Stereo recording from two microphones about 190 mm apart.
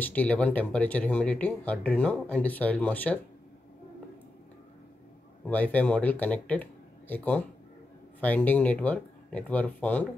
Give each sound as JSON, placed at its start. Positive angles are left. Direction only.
{"t": 0.0, "sound": "speech", "side_deg": 10}
{"t": 5.5, "sound": "speech", "side_deg": 10}